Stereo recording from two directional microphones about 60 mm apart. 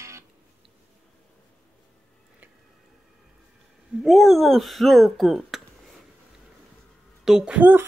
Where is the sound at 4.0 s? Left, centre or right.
Centre.